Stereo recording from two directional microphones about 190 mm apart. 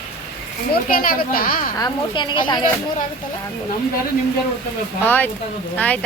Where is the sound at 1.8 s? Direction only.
25° left (ahead or behind).